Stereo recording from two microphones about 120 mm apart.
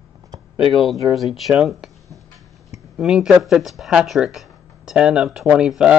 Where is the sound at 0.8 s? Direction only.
Centre (ahead or behind).